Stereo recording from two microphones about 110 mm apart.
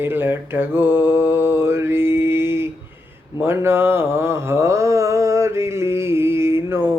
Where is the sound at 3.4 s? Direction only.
20° right (ahead or behind).